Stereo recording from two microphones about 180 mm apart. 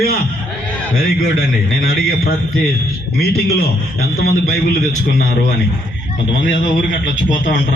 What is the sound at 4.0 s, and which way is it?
Speech, 60° left (ahead or behind).